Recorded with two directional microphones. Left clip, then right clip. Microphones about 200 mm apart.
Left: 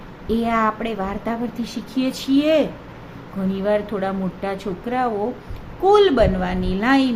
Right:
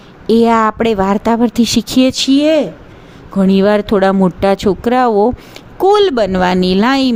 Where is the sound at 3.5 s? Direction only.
50° right (ahead or behind).